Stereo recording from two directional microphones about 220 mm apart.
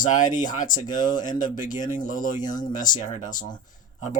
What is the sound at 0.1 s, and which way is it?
Speech, 35° left (ahead or behind).